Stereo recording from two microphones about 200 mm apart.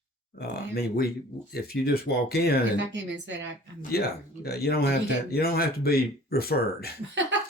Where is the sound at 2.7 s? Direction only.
65° right (ahead or behind).